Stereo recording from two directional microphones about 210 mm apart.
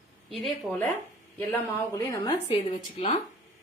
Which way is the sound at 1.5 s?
10° left (ahead or behind).